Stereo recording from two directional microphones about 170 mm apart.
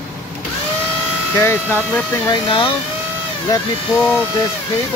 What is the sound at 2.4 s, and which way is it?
Speech, 30° left (ahead or behind).